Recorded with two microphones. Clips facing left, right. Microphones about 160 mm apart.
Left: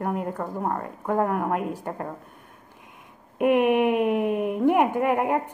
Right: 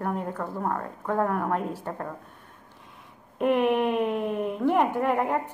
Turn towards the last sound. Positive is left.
turn(degrees=10)  # may be behind; listen again after turning